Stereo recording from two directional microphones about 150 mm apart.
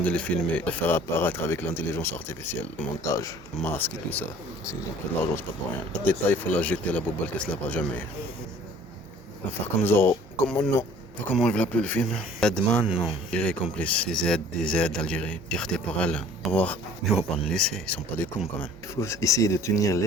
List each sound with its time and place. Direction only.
0.0 s speech: 10° left (ahead or behind)
5.9 s speech: 10° left (ahead or behind)
9.8 s speech: 15° left (ahead or behind)
12.8 s speech: 5° right (ahead or behind)
13.3 s speech: 10° left (ahead or behind)